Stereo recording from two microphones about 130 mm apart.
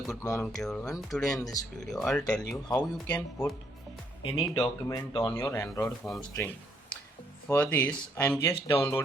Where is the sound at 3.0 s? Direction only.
20° left (ahead or behind).